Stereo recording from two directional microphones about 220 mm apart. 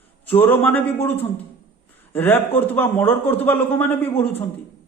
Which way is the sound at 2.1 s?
10° left (ahead or behind).